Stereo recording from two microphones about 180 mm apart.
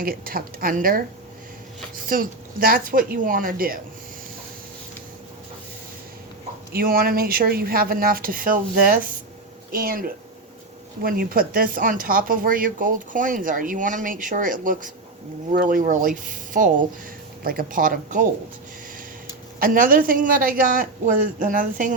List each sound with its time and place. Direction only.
0.0 s speech: 55° right (ahead or behind)
2.0 s speech: 55° right (ahead or behind)
6.7 s speech: 55° right (ahead or behind)
19.5 s speech: 50° right (ahead or behind)